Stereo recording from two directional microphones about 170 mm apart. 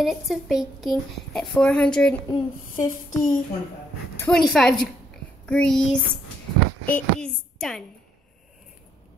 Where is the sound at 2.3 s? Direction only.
25° left (ahead or behind).